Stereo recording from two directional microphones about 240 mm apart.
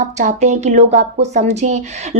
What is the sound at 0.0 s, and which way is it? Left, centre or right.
A woman's voice, right.